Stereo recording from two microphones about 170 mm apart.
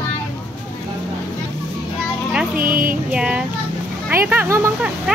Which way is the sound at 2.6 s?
55° right (ahead or behind).